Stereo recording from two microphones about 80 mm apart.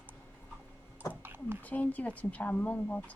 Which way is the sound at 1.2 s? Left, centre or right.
Right.